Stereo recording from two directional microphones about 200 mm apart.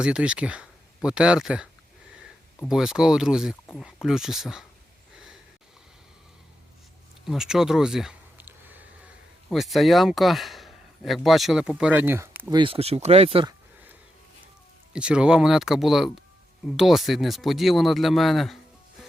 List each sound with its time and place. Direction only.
0.0 s speech: 5° right (ahead or behind)
2.6 s speech: centre (ahead or behind)
5.1 s a sound: 5° right (ahead or behind)
7.3 s speech: centre (ahead or behind)
12.5 s speech: 25° right (ahead or behind)
14.9 s speech: 5° right (ahead or behind)